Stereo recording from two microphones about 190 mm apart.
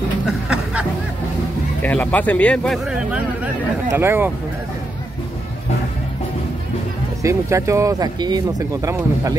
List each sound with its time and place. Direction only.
1.8 s speech: 10° left (ahead or behind); by 4.3 s 10° right (ahead or behind)
7.2 s speech: 15° right (ahead or behind)